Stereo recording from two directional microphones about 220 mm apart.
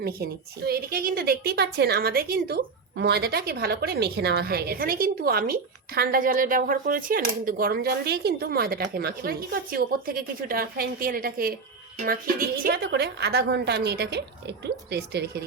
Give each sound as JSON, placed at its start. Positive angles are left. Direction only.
{"t": 0.0, "sound": "a woman's voice", "side_deg": -45}